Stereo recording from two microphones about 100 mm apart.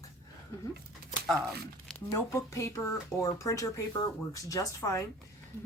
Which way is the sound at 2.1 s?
30° left (ahead or behind).